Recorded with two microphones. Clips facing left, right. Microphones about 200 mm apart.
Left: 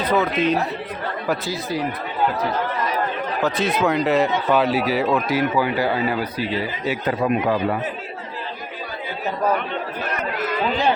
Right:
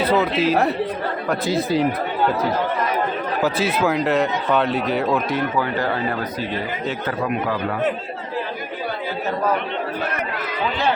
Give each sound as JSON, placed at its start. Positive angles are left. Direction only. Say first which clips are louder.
{"t": 0.0, "sound": "speech", "louder": "right 1 dB", "side_deg": -10}
{"t": 1.5, "sound": "speech", "louder": "right 6 dB", "side_deg": -25}
{"t": 3.4, "sound": "speech", "louder": "even", "side_deg": -5}